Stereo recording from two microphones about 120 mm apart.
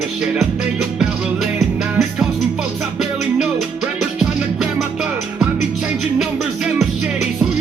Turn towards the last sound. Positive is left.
turn(degrees=-5)  # may be behind; listen again after turning